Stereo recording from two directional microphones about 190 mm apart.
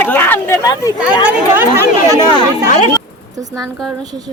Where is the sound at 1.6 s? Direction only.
15° right (ahead or behind).